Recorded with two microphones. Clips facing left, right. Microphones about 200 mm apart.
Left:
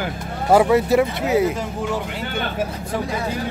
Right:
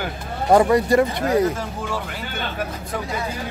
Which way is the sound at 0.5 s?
5° left (ahead or behind).